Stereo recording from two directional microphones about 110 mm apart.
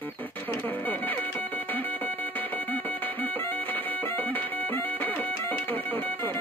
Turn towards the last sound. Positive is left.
turn(degrees=15)  # may be behind; listen again after turning